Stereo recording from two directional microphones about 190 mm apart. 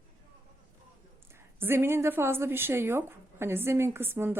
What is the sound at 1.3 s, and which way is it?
A woman's voice, 10° right (ahead or behind).